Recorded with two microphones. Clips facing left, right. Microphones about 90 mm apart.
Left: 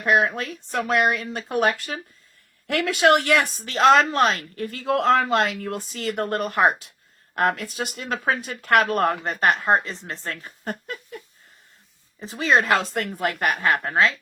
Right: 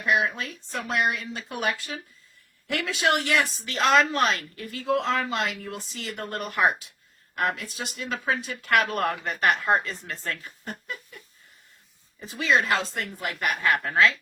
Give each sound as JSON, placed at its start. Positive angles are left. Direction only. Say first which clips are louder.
{"t": 0.0, "sound": "speech", "louder": "left 4 dB", "side_deg": 50}
{"t": 2.8, "sound": "speech", "louder": "left 7 dB", "side_deg": 60}
{"t": 4.9, "sound": "speech", "louder": "left 6 dB", "side_deg": 55}
{"t": 10.6, "sound": "speech", "louder": "left 5 dB", "side_deg": 50}
{"t": 12.2, "sound": "speech", "louder": "left 3 dB", "side_deg": 35}
{"t": 12.6, "sound": "speech", "louder": "left 5 dB", "side_deg": 60}
{"t": 13.4, "sound": "speech", "louder": "left 1 dB", "side_deg": 35}